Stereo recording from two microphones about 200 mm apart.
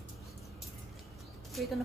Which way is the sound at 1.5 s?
Centre (ahead or behind).